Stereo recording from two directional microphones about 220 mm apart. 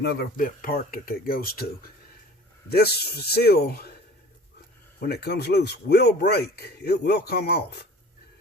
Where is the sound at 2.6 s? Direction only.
45° left (ahead or behind).